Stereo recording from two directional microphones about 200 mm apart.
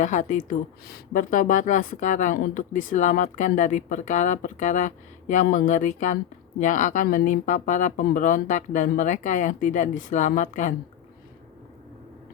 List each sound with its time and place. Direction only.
0.0 s speech: 40° left (ahead or behind)